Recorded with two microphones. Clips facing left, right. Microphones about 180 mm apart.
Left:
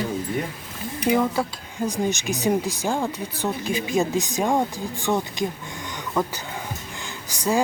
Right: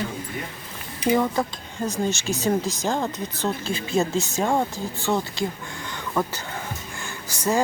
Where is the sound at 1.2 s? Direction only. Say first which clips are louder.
Even; 10° left (ahead or behind).